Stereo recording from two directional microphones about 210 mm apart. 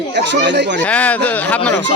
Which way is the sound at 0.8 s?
5° left (ahead or behind).